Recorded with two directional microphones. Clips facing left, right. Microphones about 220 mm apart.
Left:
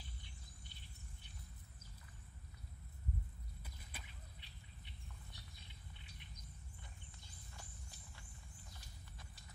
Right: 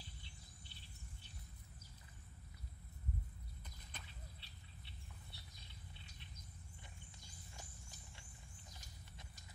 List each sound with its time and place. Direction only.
3.6 s squawk: 10° left (ahead or behind)